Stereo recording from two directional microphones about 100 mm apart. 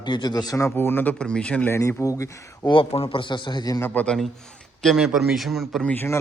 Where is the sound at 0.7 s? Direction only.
20° left (ahead or behind).